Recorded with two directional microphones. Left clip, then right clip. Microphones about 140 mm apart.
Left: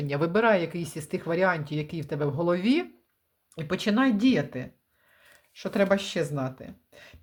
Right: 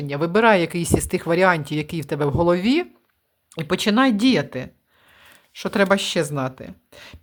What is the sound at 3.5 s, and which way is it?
Speech, 35° right (ahead or behind).